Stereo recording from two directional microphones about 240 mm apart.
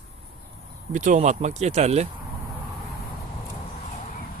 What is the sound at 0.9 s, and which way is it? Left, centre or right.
Speech, right.